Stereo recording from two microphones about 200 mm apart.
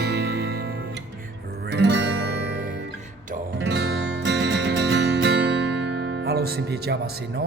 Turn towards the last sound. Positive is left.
turn(degrees=-55)  # may be behind; listen again after turning